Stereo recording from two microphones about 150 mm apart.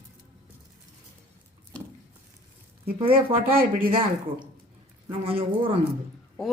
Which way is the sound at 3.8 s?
35° right (ahead or behind).